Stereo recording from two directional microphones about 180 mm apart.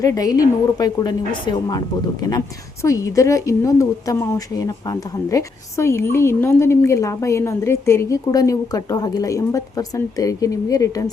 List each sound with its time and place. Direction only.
0.0 s a woman's voice: 20° left (ahead or behind)
2.8 s a woman's voice: 20° left (ahead or behind)